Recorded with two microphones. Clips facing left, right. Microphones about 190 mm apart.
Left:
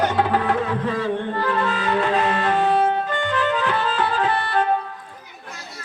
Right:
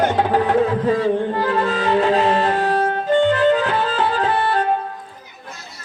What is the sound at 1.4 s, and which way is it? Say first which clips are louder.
Music: right 3 dB; 35° right (ahead or behind).